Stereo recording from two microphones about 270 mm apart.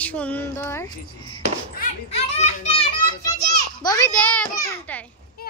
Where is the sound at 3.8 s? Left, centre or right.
Centre.